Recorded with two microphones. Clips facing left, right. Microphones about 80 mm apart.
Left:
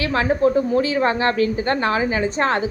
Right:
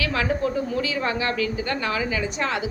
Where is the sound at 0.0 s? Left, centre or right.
Left.